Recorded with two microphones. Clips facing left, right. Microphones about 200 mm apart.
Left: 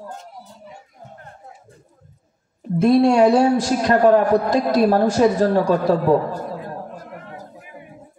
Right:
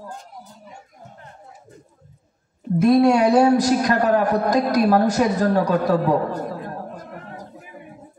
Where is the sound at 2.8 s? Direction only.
25° left (ahead or behind).